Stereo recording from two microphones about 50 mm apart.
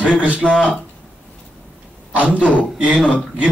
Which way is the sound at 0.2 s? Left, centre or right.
Right.